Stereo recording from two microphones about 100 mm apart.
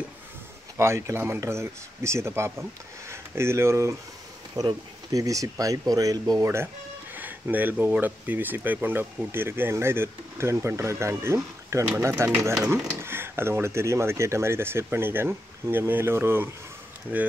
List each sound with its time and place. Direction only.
0.7 s speech: 30° right (ahead or behind)
4.6 s speech: 40° right (ahead or behind)
6.4 s speech: 25° right (ahead or behind)
7.2 s a sound: 15° right (ahead or behind)
7.8 s speech: 15° right (ahead or behind)